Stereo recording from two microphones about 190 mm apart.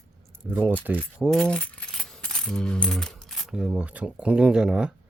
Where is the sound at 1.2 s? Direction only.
Centre (ahead or behind).